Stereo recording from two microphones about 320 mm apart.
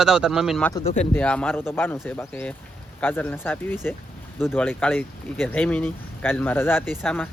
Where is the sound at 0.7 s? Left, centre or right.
Centre.